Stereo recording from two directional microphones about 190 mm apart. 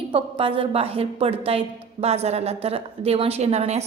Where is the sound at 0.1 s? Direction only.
30° right (ahead or behind).